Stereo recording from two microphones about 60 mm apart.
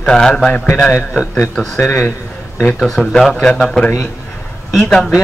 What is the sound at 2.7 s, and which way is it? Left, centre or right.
A man's voice, centre.